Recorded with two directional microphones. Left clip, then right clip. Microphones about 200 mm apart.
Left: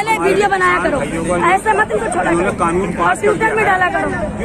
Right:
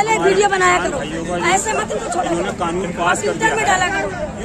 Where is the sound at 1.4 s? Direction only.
10° left (ahead or behind).